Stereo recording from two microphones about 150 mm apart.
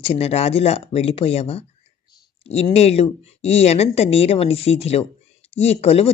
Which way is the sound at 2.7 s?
45° left (ahead or behind).